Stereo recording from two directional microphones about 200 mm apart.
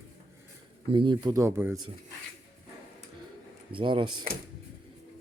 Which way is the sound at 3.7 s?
25° right (ahead or behind).